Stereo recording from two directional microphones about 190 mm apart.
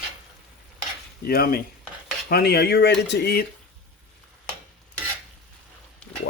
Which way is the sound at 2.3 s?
55° left (ahead or behind).